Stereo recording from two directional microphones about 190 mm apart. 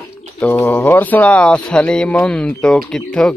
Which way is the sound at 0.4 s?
10° left (ahead or behind).